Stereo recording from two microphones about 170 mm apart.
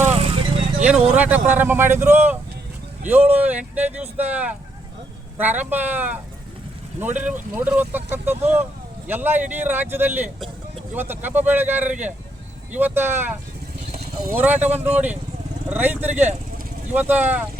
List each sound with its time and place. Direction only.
0.0 s vehicle: 35° right (ahead or behind)
0.8 s speech: 5° right (ahead or behind)
7.2 s speech: 10° right (ahead or behind)